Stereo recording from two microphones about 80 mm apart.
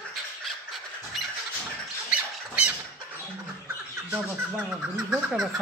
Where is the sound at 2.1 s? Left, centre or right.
Centre.